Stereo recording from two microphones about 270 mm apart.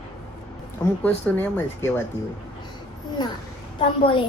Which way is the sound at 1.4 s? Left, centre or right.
Centre.